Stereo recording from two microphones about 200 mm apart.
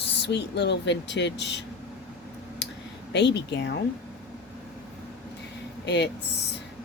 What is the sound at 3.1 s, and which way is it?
Speech, 60° left (ahead or behind).